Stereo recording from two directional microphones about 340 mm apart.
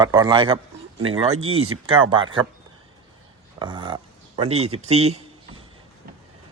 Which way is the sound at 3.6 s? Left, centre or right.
Centre.